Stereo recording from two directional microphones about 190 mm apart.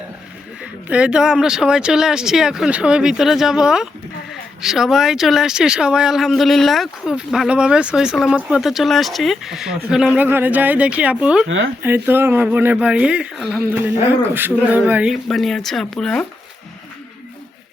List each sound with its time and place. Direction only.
0.6 s speech: 5° right (ahead or behind)
11.4 s speech: 85° right
11.8 s speech: 10° right (ahead or behind)